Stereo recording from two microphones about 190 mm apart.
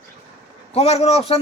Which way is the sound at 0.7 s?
35° left (ahead or behind).